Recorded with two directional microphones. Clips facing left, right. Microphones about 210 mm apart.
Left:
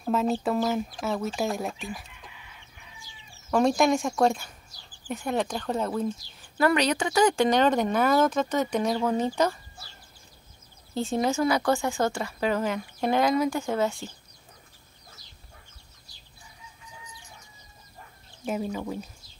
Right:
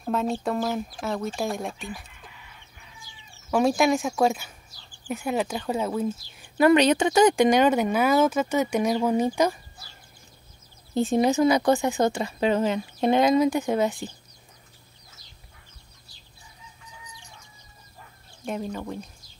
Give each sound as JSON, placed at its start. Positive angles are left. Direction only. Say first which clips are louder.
{"t": 0.0, "sound": "speech", "louder": "left 1 dB", "side_deg": 0}
{"t": 3.4, "sound": "speech", "louder": "right 1 dB", "side_deg": -5}
{"t": 6.6, "sound": "speech", "louder": "right 6 dB", "side_deg": -20}
{"t": 11.0, "sound": "speech", "louder": "right 5 dB", "side_deg": -20}
{"t": 18.4, "sound": "speech", "louder": "left 1 dB", "side_deg": 5}